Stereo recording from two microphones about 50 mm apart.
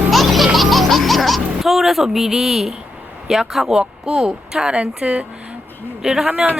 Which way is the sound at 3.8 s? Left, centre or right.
Centre.